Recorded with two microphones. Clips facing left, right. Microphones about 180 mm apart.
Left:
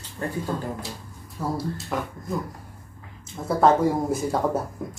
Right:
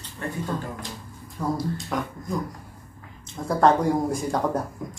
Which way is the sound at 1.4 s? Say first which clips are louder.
Right 1 dB; 5° left (ahead or behind).